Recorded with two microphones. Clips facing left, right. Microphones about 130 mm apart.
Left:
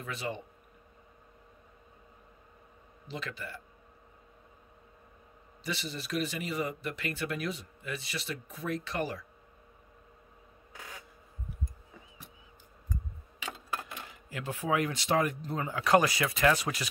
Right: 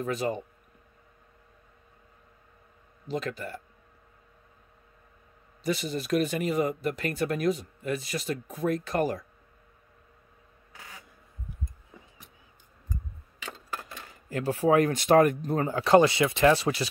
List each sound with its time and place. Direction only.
0.0 s speech: 40° right (ahead or behind)
3.1 s speech: 45° right (ahead or behind)
5.6 s speech: 45° right (ahead or behind)
14.3 s speech: 35° right (ahead or behind)